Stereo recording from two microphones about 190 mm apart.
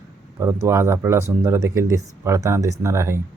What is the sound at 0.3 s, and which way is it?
Speech, 15° right (ahead or behind).